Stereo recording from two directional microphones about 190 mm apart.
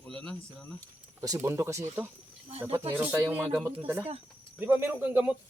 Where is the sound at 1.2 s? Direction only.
15° right (ahead or behind).